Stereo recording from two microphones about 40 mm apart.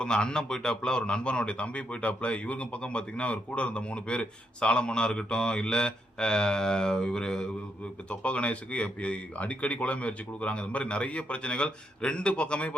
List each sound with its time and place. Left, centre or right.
0.0 s a man's voice: left
8.1 s speech: left